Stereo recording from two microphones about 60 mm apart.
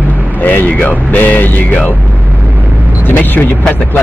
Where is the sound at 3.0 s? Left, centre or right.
Left.